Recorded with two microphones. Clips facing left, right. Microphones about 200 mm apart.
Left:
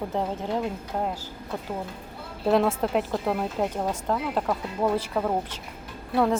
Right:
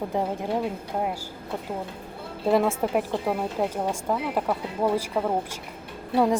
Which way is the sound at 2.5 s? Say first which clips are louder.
Even; 10° right (ahead or behind).